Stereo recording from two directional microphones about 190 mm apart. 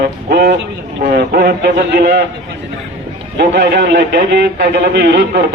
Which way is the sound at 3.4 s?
65° right (ahead or behind).